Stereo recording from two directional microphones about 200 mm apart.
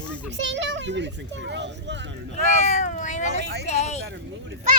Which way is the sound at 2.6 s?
35° left (ahead or behind).